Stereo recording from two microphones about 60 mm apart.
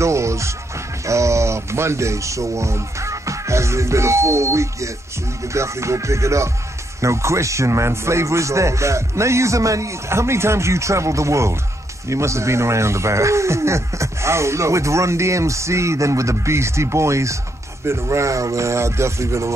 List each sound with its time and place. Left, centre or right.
0.0 s speech: right